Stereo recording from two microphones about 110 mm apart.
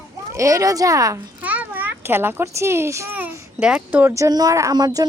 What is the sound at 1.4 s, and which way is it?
A child's voice, 15° right (ahead or behind).